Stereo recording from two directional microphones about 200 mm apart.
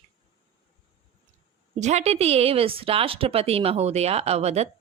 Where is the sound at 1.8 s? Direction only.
35° right (ahead or behind).